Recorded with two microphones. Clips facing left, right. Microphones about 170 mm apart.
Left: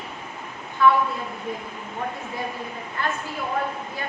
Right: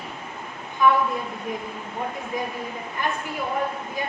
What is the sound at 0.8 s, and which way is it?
Speech, 15° right (ahead or behind).